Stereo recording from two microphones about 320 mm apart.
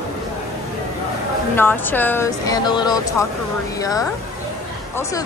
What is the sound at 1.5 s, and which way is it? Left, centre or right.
A woman's voice, centre.